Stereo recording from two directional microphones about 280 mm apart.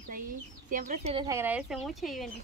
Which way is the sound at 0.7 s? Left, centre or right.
Right.